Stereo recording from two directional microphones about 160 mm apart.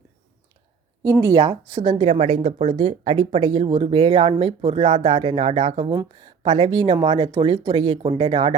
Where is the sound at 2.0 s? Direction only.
40° right (ahead or behind).